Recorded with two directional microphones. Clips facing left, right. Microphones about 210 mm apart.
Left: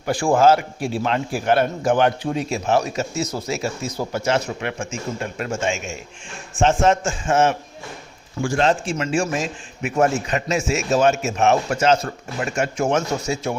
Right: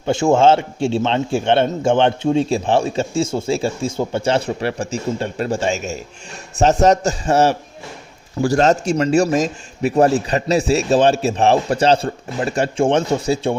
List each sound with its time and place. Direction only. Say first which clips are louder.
0.0 s a man's voice: right 3 dB; 25° right (ahead or behind)